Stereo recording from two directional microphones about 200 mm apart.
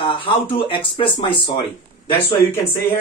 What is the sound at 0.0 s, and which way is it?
A man's voice, 25° left (ahead or behind).